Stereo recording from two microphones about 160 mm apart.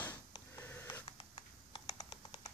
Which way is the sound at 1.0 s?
35° left (ahead or behind).